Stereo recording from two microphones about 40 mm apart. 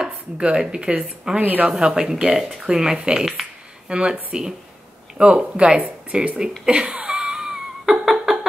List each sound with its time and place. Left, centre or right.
0.0 s speech: right
1.4 s speech: right
1.7 s speech: right
6.6 s laughter: right; by 8.4 s centre